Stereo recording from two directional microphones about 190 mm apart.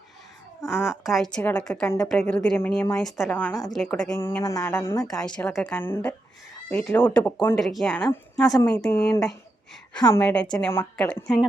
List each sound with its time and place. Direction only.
0.7 s a woman's voice: 5° right (ahead or behind); by 3.0 s 15° left (ahead or behind)
3.0 s a woman's voice: centre (ahead or behind)
5.0 s a woman's voice: 5° left (ahead or behind)
10.2 s a woman's voice: 10° left (ahead or behind)